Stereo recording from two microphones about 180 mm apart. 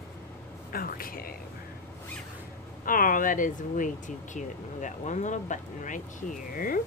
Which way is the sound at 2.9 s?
50° left (ahead or behind).